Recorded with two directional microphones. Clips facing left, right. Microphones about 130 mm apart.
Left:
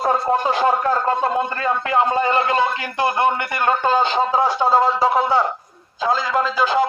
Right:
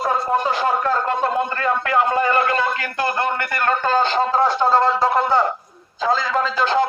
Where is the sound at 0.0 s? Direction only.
40° left (ahead or behind).